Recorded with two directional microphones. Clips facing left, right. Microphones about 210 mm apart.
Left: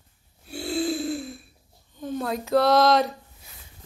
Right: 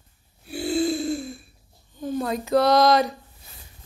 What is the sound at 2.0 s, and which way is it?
Speech, centre (ahead or behind).